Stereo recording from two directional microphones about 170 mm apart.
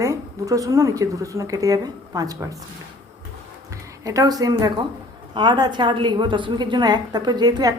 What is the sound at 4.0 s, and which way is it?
A woman's voice, 20° right (ahead or behind).